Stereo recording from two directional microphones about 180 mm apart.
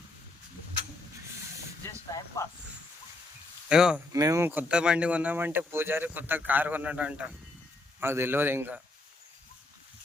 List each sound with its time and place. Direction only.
2.1 s speech: 20° left (ahead or behind)
3.7 s speech: 5° right (ahead or behind)
4.1 s speech: 20° right (ahead or behind)